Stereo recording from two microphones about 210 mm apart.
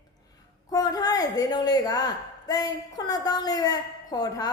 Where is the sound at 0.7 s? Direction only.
20° left (ahead or behind).